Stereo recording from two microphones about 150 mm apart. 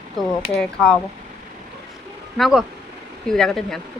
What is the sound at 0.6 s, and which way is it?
Speech, 5° left (ahead or behind).